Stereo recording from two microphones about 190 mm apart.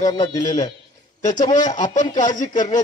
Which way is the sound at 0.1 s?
35° left (ahead or behind).